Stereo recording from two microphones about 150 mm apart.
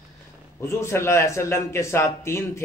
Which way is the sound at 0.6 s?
20° left (ahead or behind).